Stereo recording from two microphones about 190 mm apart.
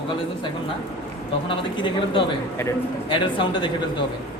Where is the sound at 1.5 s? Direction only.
25° left (ahead or behind).